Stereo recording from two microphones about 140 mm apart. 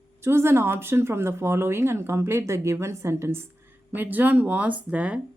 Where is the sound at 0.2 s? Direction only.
15° right (ahead or behind).